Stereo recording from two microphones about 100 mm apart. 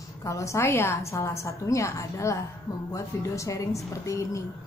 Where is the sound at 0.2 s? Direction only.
30° left (ahead or behind).